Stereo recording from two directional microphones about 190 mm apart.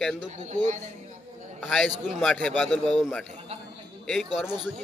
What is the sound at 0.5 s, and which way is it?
Speech, 40° right (ahead or behind).